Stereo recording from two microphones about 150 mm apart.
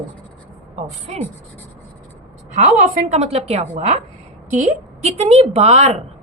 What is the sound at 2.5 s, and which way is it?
A woman's voice, 60° right (ahead or behind).